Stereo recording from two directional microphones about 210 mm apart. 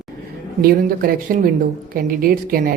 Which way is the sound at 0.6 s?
45° right (ahead or behind).